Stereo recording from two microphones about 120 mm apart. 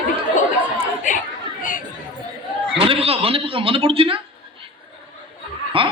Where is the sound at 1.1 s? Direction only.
90° left.